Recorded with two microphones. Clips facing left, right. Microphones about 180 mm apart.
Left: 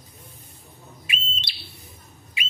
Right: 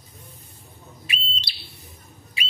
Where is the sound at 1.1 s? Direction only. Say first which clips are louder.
Right 1 dB; 35° right (ahead or behind).